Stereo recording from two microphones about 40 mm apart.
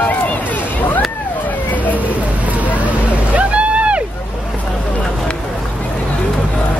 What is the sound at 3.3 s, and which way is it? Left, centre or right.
Vehicle, right.